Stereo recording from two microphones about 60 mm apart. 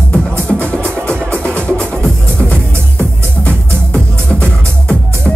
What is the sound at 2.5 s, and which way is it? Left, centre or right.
Music, left.